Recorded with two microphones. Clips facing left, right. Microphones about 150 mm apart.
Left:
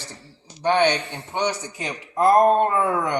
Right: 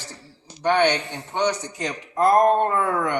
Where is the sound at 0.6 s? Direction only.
15° left (ahead or behind).